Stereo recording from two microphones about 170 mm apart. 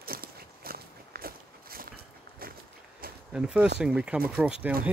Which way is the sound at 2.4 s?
60° right (ahead or behind).